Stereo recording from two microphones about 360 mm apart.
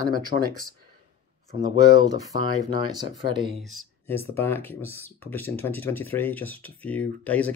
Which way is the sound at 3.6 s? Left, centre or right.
Centre.